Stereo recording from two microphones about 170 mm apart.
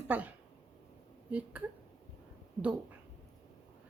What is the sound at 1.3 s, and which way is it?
Speech, 10° right (ahead or behind).